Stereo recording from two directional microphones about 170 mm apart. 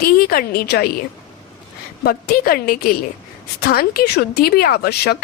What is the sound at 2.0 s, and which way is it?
A woman's voice, 60° left (ahead or behind).